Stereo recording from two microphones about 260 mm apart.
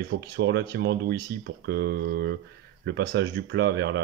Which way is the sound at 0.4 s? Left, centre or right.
Right.